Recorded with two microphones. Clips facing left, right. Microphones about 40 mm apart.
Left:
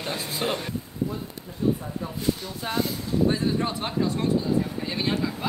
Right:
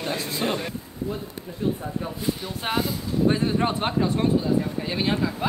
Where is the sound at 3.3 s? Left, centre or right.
Right.